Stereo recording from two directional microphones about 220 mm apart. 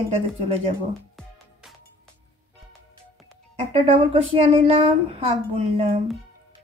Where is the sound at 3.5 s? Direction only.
25° right (ahead or behind).